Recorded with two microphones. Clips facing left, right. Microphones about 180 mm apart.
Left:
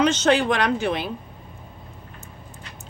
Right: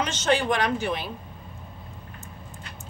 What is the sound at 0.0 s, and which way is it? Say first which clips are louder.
Speech: left 5 dB; 70° left (ahead or behind).